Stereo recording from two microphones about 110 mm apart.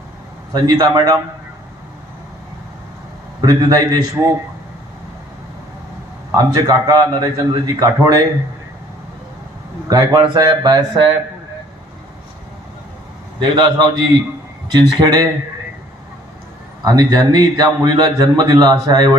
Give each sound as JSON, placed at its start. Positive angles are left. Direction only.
{"t": 0.5, "sound": "a man's voice", "side_deg": -35}
{"t": 3.4, "sound": "a man's voice", "side_deg": -35}
{"t": 6.3, "sound": "a man's voice", "side_deg": -35}
{"t": 9.9, "sound": "a man's voice", "side_deg": -35}
{"t": 13.4, "sound": "a man's voice", "side_deg": -40}
{"t": 16.8, "sound": "a man's voice", "side_deg": -35}